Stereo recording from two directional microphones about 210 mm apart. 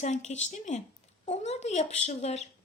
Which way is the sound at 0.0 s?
35° left (ahead or behind).